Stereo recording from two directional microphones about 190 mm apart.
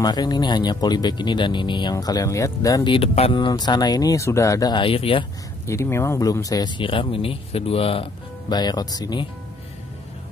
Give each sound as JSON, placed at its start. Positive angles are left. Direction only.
{"t": 0.0, "sound": "speech", "side_deg": 20}
{"t": 5.7, "sound": "speech", "side_deg": 15}